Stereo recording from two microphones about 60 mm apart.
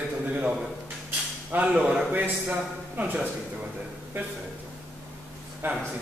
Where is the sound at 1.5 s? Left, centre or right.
Right.